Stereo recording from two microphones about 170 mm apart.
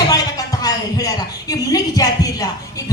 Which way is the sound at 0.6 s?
20° left (ahead or behind).